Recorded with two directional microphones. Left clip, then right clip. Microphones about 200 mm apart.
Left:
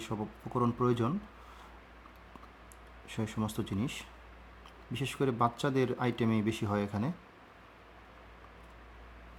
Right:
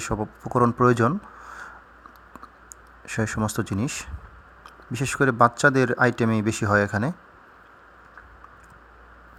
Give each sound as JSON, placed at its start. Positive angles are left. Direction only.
{"t": 0.0, "sound": "speech", "side_deg": -30}
{"t": 3.1, "sound": "speech", "side_deg": -30}